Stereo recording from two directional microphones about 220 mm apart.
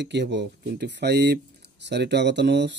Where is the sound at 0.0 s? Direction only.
50° right (ahead or behind).